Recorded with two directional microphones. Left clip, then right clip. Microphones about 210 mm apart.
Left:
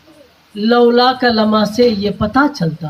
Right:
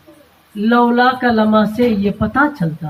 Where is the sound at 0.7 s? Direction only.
50° left (ahead or behind).